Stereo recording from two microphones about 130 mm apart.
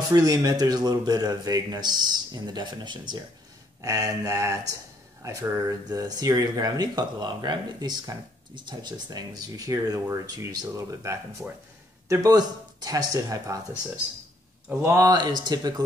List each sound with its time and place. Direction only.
0.1 s speech: 25° right (ahead or behind)
3.8 s speech: 25° right (ahead or behind)
14.8 s speech: 20° right (ahead or behind)
15.0 s speech: 30° right (ahead or behind)